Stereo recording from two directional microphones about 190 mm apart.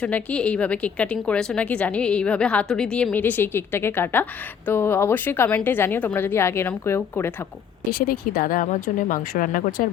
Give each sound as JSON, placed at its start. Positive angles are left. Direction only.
{"t": 0.0, "sound": "a woman's voice", "side_deg": 5}
{"t": 8.0, "sound": "a woman's voice", "side_deg": 50}